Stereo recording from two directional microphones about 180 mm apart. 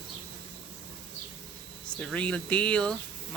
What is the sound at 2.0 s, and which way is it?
Speech, 5° left (ahead or behind).